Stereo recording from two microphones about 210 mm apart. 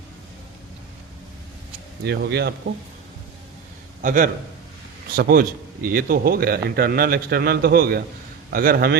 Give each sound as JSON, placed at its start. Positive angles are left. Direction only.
{"t": 2.0, "sound": "a man's voice", "side_deg": -50}
{"t": 4.0, "sound": "a man's voice", "side_deg": -40}